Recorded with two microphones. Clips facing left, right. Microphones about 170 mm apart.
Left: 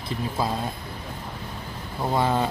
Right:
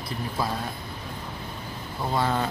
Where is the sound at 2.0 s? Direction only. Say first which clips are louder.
Left 3 dB; 15° left (ahead or behind).